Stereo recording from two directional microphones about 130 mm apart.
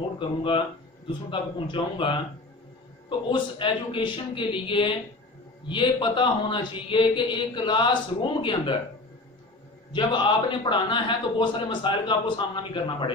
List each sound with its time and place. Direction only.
0.4 s a man's voice: 40° left (ahead or behind)
9.9 s a man's voice: 40° left (ahead or behind)